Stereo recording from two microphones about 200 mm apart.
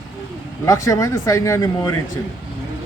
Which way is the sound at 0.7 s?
15° left (ahead or behind).